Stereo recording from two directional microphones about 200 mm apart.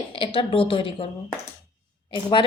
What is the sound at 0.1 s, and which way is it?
A woman's voice, 25° left (ahead or behind).